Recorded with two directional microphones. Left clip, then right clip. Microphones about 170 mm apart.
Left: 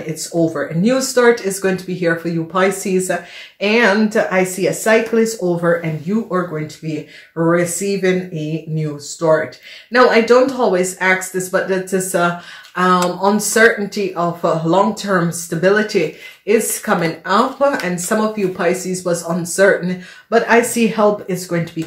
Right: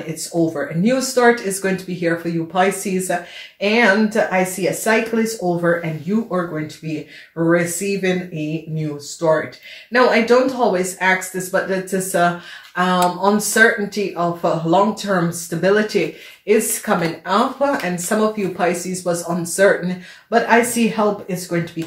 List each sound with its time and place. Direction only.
0.8 s speech: 45° left (ahead or behind)
9.2 s speech: 30° left (ahead or behind)